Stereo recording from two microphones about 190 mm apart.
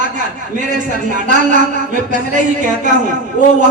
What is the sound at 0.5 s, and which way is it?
A man's voice, 40° right (ahead or behind).